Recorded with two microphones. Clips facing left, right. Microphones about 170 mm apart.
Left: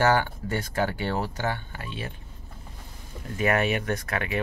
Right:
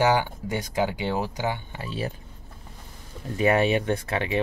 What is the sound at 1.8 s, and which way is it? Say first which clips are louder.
Speech: right 5 dB; 35° right (ahead or behind).